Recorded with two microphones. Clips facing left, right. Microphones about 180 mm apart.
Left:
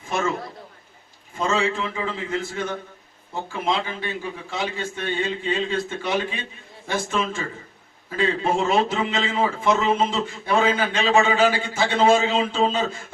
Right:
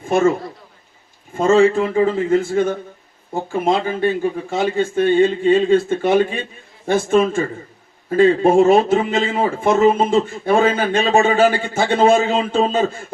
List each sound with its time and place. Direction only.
1.4 s speech: 50° right (ahead or behind)